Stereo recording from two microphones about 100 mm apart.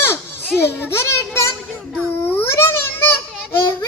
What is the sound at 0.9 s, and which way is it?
Speech, 25° left (ahead or behind).